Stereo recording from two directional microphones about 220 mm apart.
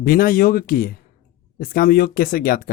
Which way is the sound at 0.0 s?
40° left (ahead or behind).